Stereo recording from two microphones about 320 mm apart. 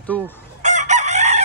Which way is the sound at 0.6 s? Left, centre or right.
Right.